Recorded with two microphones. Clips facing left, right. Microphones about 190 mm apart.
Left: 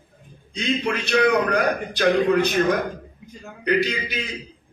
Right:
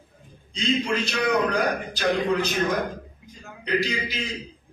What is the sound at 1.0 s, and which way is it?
A man's voice, 65° left (ahead or behind).